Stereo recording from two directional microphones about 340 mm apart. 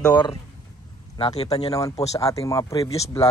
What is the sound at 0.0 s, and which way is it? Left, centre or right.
Speech, centre.